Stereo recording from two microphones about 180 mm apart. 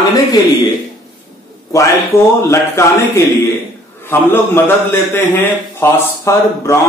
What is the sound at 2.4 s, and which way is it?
Speech, 15° left (ahead or behind).